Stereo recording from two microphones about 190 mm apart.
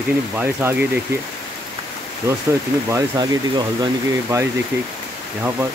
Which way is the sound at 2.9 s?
20° right (ahead or behind).